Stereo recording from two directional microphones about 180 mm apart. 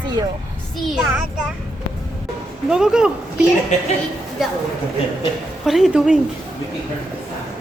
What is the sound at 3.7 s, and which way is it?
Speech, 40° left (ahead or behind).